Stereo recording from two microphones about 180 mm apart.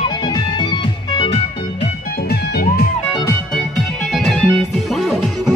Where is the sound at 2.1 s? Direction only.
60° left (ahead or behind).